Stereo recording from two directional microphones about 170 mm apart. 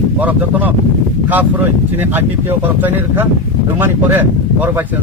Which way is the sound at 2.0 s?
10° right (ahead or behind).